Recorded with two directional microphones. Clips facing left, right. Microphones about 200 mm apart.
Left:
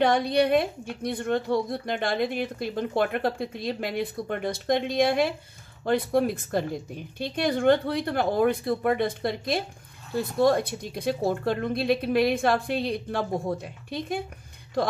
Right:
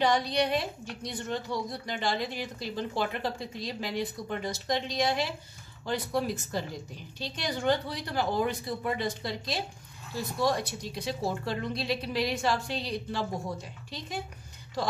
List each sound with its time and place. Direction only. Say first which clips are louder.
0.0 s a woman's voice: left 5 dB; 55° left (ahead or behind)